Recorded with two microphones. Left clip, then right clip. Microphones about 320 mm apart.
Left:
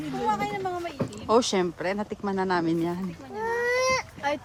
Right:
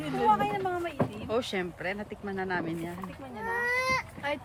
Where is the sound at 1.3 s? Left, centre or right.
Centre.